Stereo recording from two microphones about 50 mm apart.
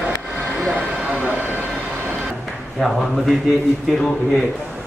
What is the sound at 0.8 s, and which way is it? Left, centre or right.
Vehicle, right.